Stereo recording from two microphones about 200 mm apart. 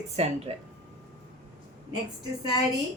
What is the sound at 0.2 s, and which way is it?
Speech, 35° right (ahead or behind).